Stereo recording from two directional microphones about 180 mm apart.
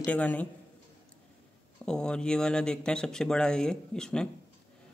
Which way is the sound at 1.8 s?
5° left (ahead or behind).